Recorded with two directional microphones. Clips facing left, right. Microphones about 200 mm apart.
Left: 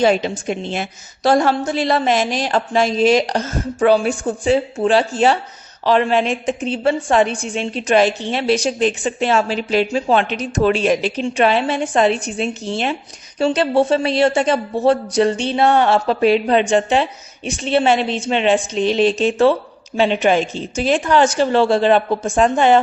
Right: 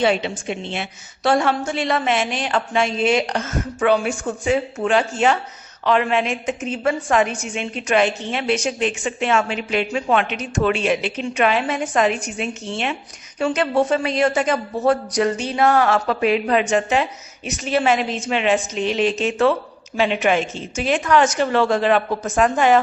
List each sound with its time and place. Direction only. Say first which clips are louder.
0.0 s a man's voice: left 4 dB; 40° left (ahead or behind)